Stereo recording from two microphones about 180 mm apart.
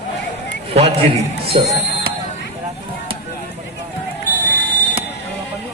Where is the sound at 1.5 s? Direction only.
30° right (ahead or behind).